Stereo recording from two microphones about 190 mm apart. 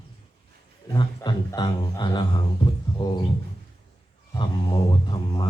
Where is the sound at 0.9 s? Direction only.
20° left (ahead or behind).